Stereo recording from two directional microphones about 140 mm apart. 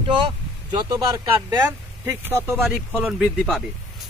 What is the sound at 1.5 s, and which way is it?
Speech, 25° right (ahead or behind).